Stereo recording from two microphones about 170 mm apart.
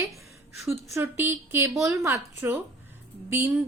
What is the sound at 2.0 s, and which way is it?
A woman's voice, 15° right (ahead or behind).